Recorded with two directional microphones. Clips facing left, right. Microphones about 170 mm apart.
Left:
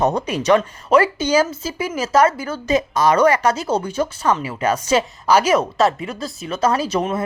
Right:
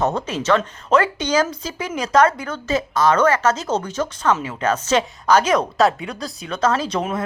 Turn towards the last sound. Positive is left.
turn(degrees=10)  # may be behind; listen again after turning